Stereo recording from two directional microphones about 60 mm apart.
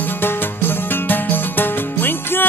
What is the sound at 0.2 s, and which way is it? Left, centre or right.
Music, left.